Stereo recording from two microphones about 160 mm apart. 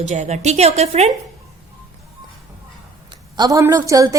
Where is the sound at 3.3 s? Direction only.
25° right (ahead or behind).